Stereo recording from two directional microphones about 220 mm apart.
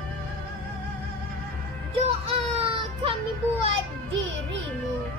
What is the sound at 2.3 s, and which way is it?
Child singing, 25° right (ahead or behind).